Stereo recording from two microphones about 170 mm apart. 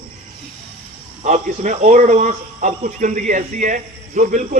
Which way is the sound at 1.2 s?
45° right (ahead or behind).